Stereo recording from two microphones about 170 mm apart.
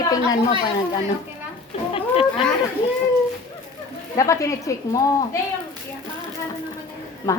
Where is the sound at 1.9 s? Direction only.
35° left (ahead or behind).